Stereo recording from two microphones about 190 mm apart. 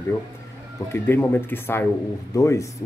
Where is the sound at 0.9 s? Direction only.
10° left (ahead or behind).